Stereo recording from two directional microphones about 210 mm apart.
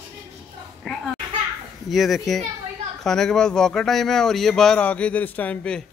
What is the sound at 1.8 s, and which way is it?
Speech, centre (ahead or behind).